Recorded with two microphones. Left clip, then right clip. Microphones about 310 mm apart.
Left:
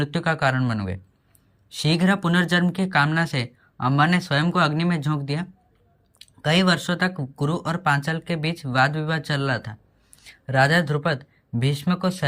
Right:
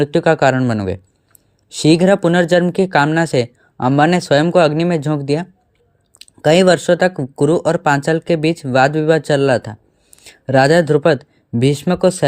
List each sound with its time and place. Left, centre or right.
0.0 s speech: centre
1.7 s speech: centre
6.5 s speech: centre
7.2 s speech: right
7.7 s speech: centre